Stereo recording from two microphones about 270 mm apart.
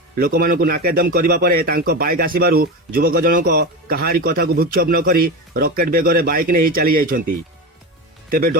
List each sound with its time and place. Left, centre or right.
0.2 s speech: right
8.3 s speech: right